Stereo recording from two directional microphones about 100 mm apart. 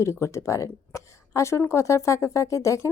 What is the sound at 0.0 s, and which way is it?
Speech, 30° left (ahead or behind).